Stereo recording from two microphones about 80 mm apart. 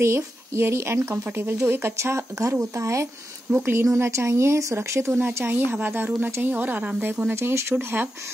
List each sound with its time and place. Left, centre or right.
0.0 s speech: right
3.5 s speech: right
3.8 s speech: right
5.2 s speech: right
7.3 s speech: right